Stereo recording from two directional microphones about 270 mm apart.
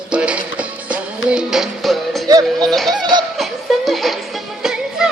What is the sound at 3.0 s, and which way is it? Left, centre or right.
Laughter, centre.